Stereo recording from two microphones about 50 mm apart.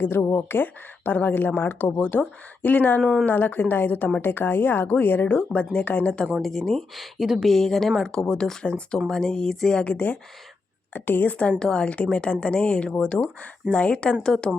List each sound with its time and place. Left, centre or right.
0.0 s a woman's voice: left
5.3 s speech: left
6.4 s speech: centre
6.9 s speech: centre
7.5 s speech: centre
9.8 s speech: left
11.6 s speech: centre